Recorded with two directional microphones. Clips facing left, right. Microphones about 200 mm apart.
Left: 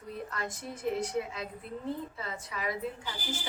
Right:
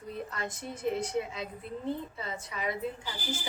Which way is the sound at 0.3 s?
Centre (ahead or behind).